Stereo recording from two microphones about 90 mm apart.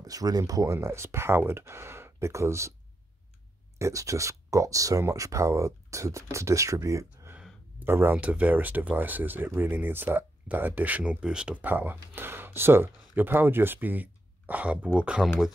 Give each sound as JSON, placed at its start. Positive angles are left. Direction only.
{"t": 0.0, "sound": "speech", "side_deg": -40}
{"t": 3.7, "sound": "speech", "side_deg": -35}
{"t": 7.8, "sound": "speech", "side_deg": -25}